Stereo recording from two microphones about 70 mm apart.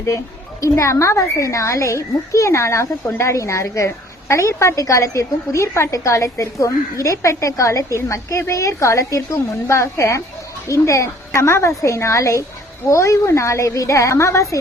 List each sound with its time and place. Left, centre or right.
0.6 s a child's voice: left